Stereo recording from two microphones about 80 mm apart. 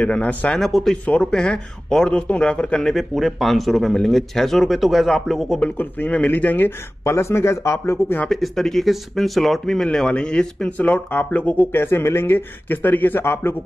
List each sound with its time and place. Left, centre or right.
0.0 s speech: centre
0.6 s speech: centre
1.0 s speech: centre
5.8 s speech: left
7.1 s speech: left
8.3 s speech: centre
11.1 s speech: left
11.7 s speech: left